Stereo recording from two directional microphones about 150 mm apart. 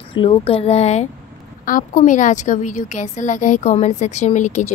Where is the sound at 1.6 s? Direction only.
60° left (ahead or behind).